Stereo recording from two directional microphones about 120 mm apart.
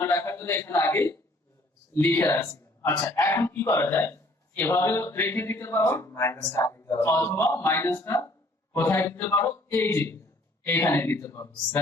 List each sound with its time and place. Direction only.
0.0 s a man's voice: 20° left (ahead or behind)